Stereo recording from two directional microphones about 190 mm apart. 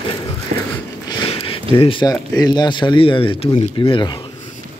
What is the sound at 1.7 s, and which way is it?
Speech, 25° left (ahead or behind).